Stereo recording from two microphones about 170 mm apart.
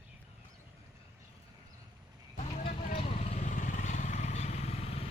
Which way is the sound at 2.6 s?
35° left (ahead or behind).